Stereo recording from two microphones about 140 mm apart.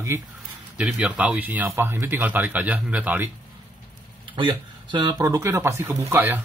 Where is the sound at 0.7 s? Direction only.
10° right (ahead or behind).